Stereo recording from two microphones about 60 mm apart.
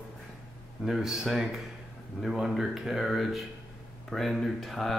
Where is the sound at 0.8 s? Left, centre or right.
Centre.